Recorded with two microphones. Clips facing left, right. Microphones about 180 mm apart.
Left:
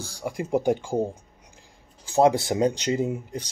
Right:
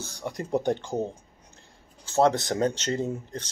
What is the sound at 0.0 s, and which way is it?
Speech, 10° left (ahead or behind).